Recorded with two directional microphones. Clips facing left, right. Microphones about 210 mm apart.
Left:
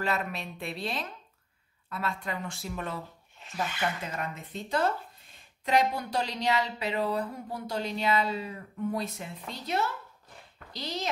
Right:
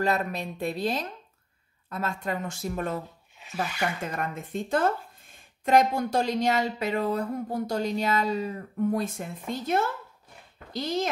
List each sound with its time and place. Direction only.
0.0 s speech: 40° right (ahead or behind)
4.0 s speech: 50° right (ahead or behind)